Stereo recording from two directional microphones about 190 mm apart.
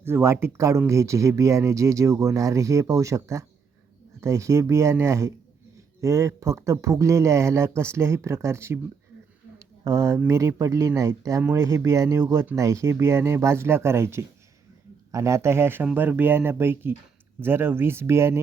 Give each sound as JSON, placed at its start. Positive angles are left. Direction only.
{"t": 0.0, "sound": "speech", "side_deg": -15}